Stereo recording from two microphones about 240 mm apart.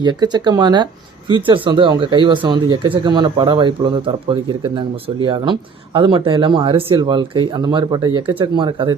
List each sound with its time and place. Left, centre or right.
0.0 s speech: centre